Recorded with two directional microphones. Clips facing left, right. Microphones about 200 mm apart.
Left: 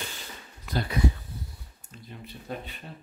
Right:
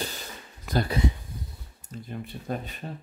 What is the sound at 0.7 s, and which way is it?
Speech, 45° right (ahead or behind).